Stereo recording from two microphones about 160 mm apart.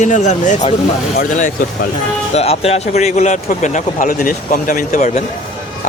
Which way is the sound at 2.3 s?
40° left (ahead or behind).